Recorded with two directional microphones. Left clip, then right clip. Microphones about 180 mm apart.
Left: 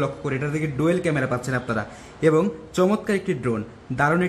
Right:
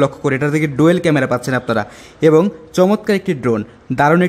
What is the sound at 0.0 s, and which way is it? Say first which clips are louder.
Speech: right 10 dB; 40° right (ahead or behind).